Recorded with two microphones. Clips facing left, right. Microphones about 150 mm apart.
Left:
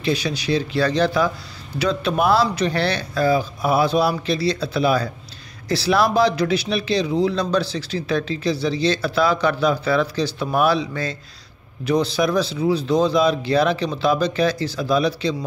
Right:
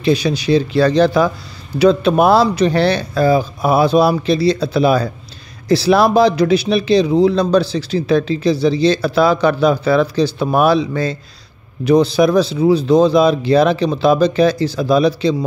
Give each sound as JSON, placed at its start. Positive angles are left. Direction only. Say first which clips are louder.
{"t": 0.0, "sound": "speech", "louder": "right 7 dB", "side_deg": -20}
{"t": 12.2, "sound": "speech", "louder": "right 7 dB", "side_deg": -25}
{"t": 12.9, "sound": "speech", "louder": "right 7 dB", "side_deg": -70}
{"t": 13.2, "sound": "speech", "louder": "right 6 dB", "side_deg": -20}